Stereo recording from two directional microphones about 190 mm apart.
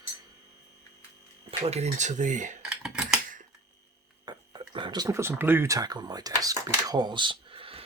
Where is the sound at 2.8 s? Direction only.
5° right (ahead or behind).